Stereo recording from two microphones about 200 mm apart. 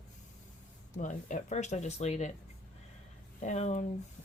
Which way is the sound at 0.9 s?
40° left (ahead or behind).